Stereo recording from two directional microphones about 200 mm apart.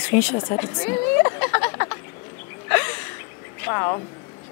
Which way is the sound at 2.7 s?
10° left (ahead or behind).